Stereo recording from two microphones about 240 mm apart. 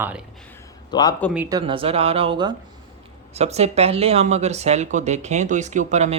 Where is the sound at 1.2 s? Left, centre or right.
Centre.